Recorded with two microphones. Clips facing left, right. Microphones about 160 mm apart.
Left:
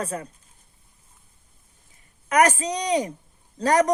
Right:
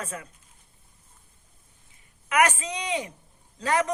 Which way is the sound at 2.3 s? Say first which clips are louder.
Left 4 dB; 40° left (ahead or behind).